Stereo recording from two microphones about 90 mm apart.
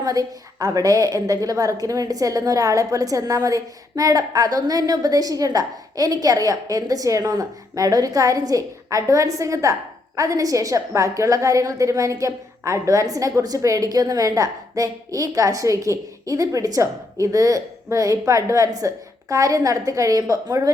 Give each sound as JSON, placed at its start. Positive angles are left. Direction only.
{"t": 0.0, "sound": "a woman's voice", "side_deg": -40}